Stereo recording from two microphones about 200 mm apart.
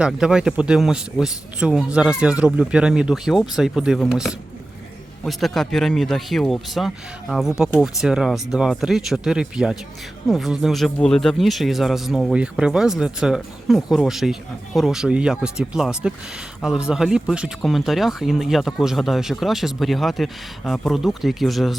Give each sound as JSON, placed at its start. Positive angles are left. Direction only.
{"t": 0.0, "sound": "speech", "side_deg": -5}